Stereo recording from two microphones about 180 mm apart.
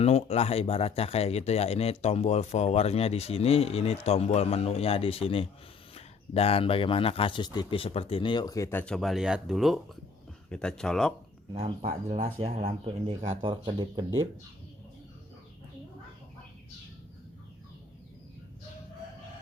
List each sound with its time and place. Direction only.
0.0 s speech: 35° left (ahead or behind); by 11.1 s 5° left (ahead or behind)
11.5 s speech: 35° right (ahead or behind)
13.4 s speech: 25° right (ahead or behind)